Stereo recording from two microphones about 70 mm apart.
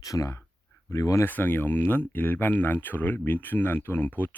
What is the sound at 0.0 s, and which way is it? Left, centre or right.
Speech, left.